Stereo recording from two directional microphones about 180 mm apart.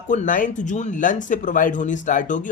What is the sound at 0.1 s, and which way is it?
Speech, 45° left (ahead or behind).